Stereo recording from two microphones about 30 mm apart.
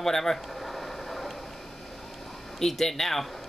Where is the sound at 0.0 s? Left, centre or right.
Centre.